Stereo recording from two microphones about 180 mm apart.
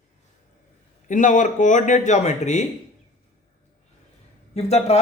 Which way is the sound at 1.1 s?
45° left (ahead or behind).